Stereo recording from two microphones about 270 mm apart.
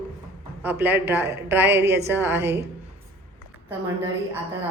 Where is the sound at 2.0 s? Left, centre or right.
Centre.